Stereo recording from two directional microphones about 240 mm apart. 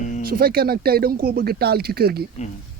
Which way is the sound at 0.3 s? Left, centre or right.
Right.